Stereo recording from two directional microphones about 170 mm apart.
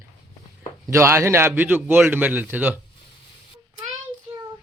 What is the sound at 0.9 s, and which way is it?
A man's voice, 15° right (ahead or behind).